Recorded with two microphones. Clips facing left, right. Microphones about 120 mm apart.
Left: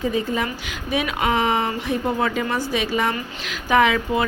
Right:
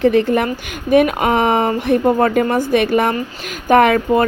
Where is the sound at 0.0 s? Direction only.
70° right (ahead or behind).